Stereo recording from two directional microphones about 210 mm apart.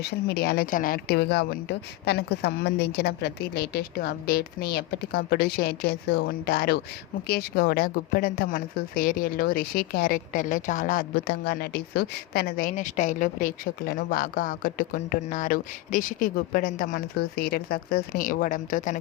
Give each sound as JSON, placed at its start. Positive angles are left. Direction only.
{"t": 0.0, "sound": "a woman's voice", "side_deg": 50}